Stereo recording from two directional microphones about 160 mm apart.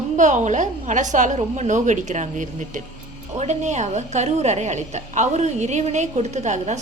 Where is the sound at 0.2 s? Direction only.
50° right (ahead or behind).